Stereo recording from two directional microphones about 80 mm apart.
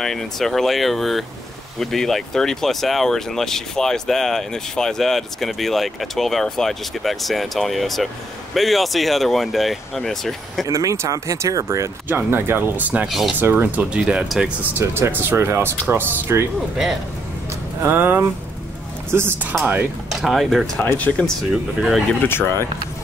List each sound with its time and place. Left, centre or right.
0.0 s speech: centre
10.7 s speech: right
12.1 s speech: right
13.0 s speech: centre
13.4 s speech: right; by 14.5 s centre
14.7 s speech: right
17.8 s speech: right
20.1 s speech: centre
20.7 s speech: centre
21.4 s speech: centre
22.2 s speech: left